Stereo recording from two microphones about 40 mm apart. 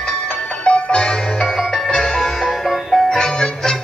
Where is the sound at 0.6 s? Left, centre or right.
Left.